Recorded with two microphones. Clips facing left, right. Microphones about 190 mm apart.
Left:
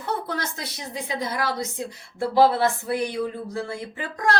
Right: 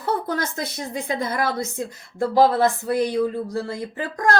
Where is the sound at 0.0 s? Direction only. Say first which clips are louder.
Right 4 dB; 45° right (ahead or behind).